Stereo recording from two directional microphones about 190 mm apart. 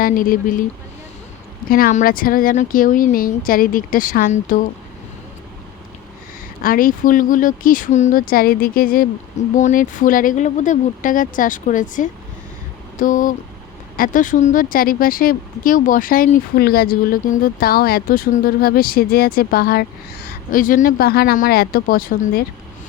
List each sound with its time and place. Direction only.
0.0 s speech: 45° left (ahead or behind)
1.7 s speech: 45° left (ahead or behind)
6.6 s speech: 45° left (ahead or behind)